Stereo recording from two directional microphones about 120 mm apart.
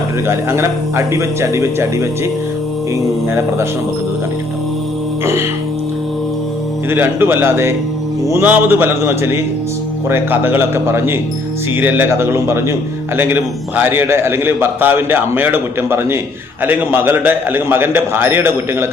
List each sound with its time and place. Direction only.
0.3 s speech: 20° right (ahead or behind)
5.2 s speech: 20° right (ahead or behind)
6.9 s a man's voice: 15° right (ahead or behind)